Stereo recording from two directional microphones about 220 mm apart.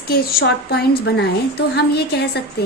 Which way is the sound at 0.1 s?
45° left (ahead or behind).